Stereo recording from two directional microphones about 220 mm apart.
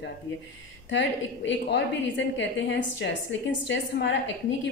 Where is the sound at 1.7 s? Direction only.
55° left (ahead or behind).